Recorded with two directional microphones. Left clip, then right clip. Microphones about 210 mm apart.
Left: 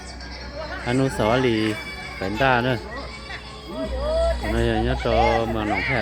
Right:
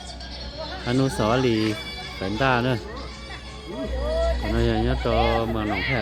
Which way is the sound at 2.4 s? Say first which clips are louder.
Left 2 dB; 10° right (ahead or behind).